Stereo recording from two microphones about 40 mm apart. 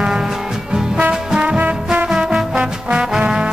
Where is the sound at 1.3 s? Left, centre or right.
Right.